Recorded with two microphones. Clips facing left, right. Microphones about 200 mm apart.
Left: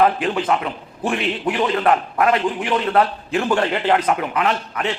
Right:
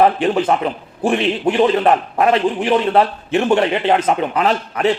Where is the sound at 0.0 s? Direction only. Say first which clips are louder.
Right 4 dB; 30° right (ahead or behind).